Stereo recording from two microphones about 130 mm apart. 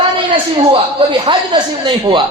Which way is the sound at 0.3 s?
45° right (ahead or behind).